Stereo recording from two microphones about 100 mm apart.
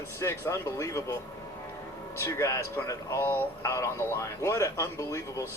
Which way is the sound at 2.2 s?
30° left (ahead or behind).